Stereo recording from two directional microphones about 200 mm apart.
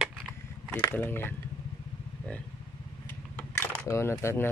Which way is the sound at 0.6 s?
10° left (ahead or behind).